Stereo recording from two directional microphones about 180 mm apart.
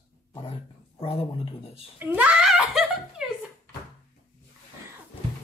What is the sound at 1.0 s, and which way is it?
Speech, 35° left (ahead or behind).